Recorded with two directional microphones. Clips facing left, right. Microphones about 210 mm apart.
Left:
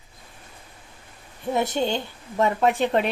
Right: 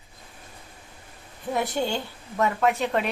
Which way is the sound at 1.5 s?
25° left (ahead or behind).